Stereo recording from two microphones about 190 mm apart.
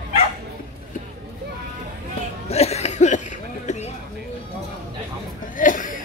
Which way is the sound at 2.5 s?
35° left (ahead or behind).